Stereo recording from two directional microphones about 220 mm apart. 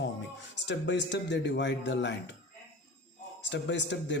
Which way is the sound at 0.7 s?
55° left (ahead or behind).